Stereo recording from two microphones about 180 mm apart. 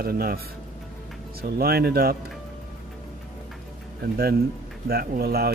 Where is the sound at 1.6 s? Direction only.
60° right (ahead or behind).